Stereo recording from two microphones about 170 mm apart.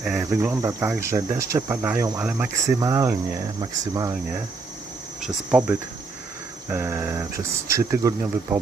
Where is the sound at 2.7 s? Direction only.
20° right (ahead or behind).